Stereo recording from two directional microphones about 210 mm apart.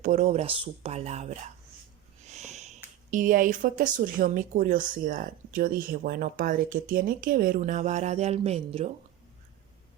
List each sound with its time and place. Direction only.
0.0 s speech: 35° right (ahead or behind)